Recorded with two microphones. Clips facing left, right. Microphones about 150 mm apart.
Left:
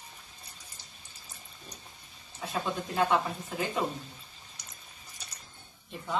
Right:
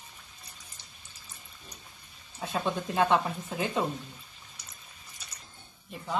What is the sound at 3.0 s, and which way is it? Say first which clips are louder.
Speech: right 2 dB; 25° right (ahead or behind).